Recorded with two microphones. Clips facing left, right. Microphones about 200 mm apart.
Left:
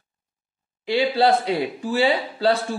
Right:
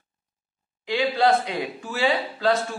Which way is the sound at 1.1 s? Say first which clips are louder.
Left 1 dB; 35° left (ahead or behind).